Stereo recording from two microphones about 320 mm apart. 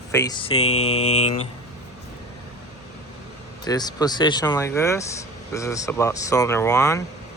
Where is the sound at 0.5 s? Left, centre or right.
Left.